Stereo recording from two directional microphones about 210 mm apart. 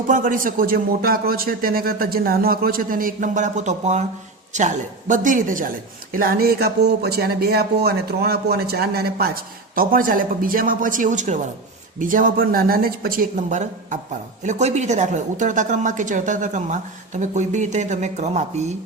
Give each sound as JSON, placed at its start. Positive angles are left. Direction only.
{"t": 0.1, "sound": "a woman's voice", "side_deg": -40}